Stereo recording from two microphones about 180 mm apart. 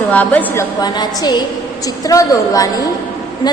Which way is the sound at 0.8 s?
25° left (ahead or behind).